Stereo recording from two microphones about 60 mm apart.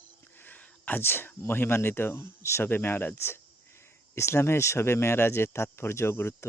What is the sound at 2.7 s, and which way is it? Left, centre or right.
Speech, left.